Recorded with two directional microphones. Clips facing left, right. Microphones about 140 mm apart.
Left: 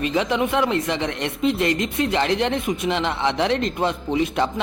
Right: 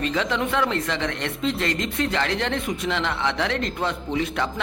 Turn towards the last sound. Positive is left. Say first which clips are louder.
# left 4 dB
turn(degrees=20)  # may be behind; listen again after turning